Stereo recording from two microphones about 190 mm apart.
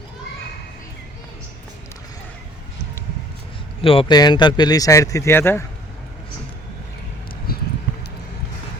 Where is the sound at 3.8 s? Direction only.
30° left (ahead or behind); by 5.6 s 10° left (ahead or behind).